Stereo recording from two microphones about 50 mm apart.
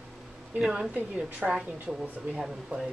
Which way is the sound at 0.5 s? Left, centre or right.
Centre.